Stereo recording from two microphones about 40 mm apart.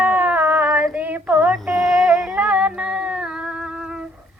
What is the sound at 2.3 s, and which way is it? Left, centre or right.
Music, right.